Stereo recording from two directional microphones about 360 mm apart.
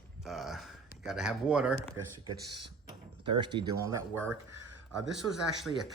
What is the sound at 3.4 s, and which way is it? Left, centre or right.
Speech, centre.